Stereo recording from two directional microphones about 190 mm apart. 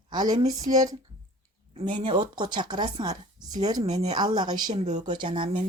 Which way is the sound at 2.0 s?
25° right (ahead or behind).